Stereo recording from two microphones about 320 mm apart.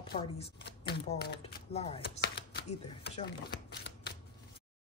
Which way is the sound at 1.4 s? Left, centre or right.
Centre.